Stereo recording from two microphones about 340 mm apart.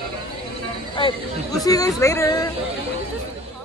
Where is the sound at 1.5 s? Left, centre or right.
Centre.